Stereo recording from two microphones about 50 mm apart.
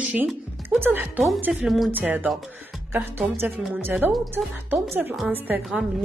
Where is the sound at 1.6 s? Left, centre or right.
Centre.